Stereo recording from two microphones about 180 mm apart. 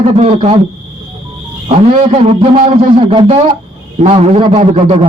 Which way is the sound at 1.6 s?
35° right (ahead or behind).